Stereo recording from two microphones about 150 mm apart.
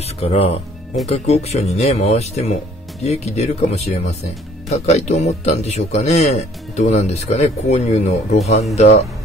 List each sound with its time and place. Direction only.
0.2 s speech: 45° left (ahead or behind)